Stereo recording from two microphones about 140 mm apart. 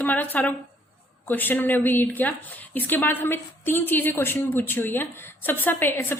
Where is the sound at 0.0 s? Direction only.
10° left (ahead or behind).